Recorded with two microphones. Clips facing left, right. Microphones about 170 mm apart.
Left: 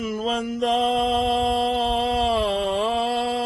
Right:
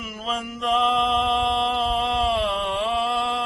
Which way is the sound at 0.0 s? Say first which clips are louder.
Left 5 dB; 40° left (ahead or behind).